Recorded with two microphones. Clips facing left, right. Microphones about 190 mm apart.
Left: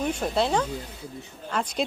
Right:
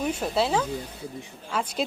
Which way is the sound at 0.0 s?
5° right (ahead or behind).